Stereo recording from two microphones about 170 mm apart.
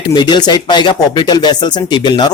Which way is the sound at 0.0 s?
25° left (ahead or behind).